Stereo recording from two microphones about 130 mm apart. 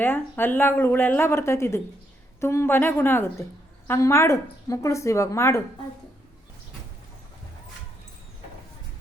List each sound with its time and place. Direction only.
0.0 s a woman's voice: 15° left (ahead or behind)